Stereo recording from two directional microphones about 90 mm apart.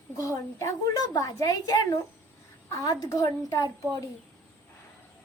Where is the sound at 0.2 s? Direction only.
40° left (ahead or behind).